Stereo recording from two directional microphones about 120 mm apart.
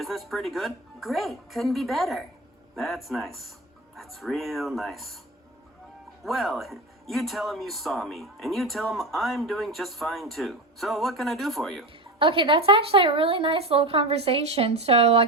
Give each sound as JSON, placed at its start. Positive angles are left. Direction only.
{"t": 0.0, "sound": "speech", "side_deg": 0}
{"t": 6.2, "sound": "speech", "side_deg": 0}
{"t": 12.2, "sound": "speech", "side_deg": -50}